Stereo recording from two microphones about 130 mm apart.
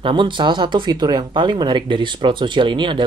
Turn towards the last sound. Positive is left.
turn(degrees=-40)  # may be behind; listen again after turning